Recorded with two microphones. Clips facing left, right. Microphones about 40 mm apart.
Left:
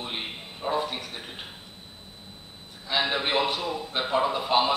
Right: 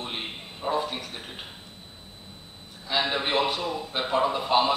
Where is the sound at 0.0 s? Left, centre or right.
Centre.